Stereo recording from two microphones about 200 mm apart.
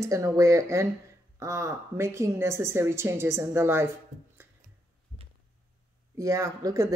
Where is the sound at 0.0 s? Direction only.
15° right (ahead or behind).